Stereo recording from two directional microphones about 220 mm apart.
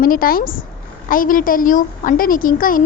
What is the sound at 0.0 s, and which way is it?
A woman's voice, 40° left (ahead or behind).